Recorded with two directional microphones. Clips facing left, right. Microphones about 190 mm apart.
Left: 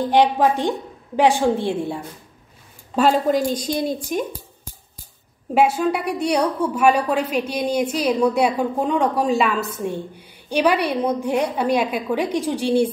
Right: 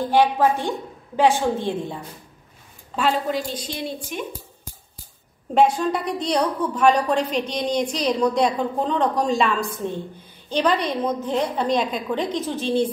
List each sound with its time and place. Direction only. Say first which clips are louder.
0.1 s a woman's voice: left 1 dB; 15° left (ahead or behind)
3.0 s a woman's voice: left 6 dB; 45° left (ahead or behind)
5.5 s a woman's voice: left 1 dB; 5° left (ahead or behind)